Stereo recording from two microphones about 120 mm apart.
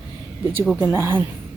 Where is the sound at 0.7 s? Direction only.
20° right (ahead or behind).